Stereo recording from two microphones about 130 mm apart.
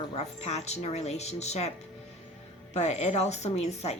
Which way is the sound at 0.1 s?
55° left (ahead or behind).